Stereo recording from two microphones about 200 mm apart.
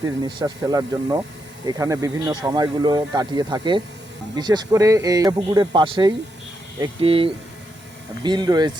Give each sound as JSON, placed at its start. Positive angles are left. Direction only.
{"t": 0.3, "sound": "speech", "side_deg": -20}